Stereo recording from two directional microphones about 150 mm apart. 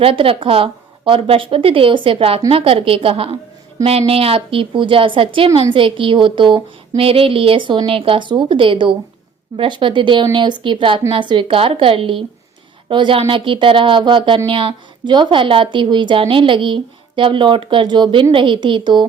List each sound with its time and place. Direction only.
0.0 s speech: 35° right (ahead or behind)